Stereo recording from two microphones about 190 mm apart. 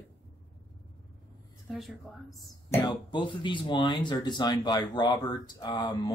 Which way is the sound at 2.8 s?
25° left (ahead or behind).